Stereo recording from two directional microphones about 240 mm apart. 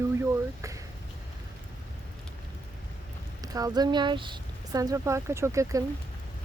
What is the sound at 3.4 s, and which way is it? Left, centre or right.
Speech, centre.